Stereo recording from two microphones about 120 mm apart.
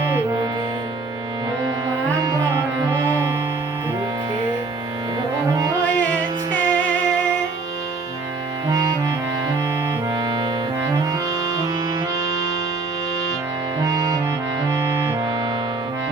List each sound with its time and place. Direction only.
6.5 s music: 10° left (ahead or behind)
10.2 s accordion: 35° right (ahead or behind)
13.8 s music: 25° right (ahead or behind)